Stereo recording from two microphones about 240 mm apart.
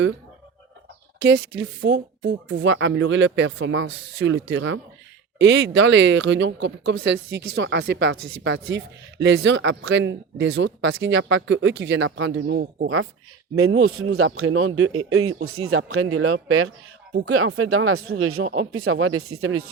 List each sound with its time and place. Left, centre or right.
1.2 s speech: right
13.6 s speech: right